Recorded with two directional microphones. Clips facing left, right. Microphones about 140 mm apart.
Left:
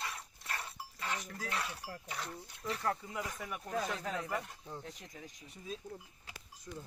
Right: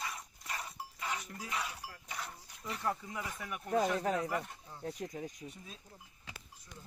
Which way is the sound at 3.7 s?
35° right (ahead or behind).